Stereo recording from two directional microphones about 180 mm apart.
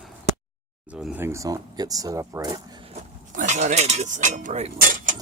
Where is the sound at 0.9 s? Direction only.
5° right (ahead or behind); by 2.6 s 20° right (ahead or behind).